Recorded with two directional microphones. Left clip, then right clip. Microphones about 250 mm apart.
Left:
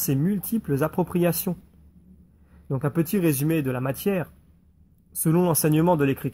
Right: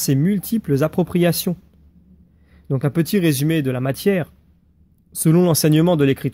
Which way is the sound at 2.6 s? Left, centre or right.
Right.